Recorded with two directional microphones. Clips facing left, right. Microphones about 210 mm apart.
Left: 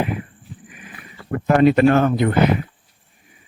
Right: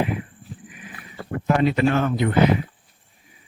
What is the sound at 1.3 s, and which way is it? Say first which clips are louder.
Speech: left 6 dB; 55° left (ahead or behind).